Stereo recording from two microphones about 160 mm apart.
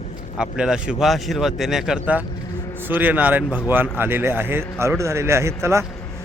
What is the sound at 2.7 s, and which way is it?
Speech, 10° right (ahead or behind).